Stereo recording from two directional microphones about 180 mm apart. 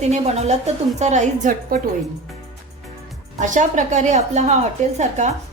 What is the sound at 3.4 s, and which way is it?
A woman's voice, 45° right (ahead or behind).